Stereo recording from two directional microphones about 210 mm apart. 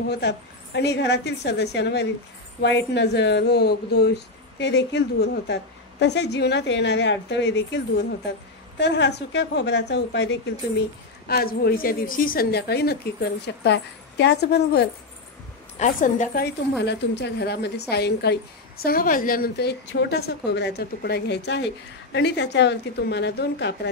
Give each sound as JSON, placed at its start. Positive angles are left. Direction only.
{"t": 0.1, "sound": "a woman's voice", "side_deg": 55}
{"t": 15.8, "sound": "a woman's voice", "side_deg": 40}